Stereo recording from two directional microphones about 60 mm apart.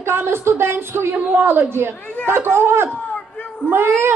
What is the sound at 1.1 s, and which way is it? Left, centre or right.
Speech, right.